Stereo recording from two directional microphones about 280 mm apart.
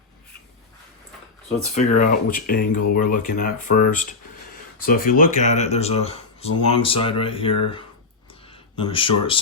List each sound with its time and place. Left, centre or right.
1.7 s speech: left